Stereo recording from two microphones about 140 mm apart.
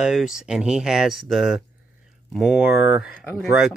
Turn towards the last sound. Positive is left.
turn(degrees=-5)  # may be behind; listen again after turning